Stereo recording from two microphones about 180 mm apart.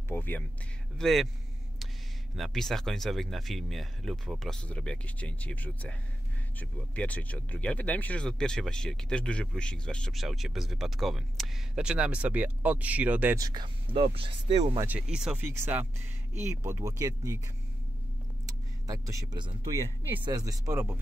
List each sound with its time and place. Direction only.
0.1 s speech: 10° left (ahead or behind)
2.3 s speech: centre (ahead or behind)
13.9 s speech: 30° right (ahead or behind)
14.8 s speech: 5° right (ahead or behind)
18.5 s speech: 20° right (ahead or behind)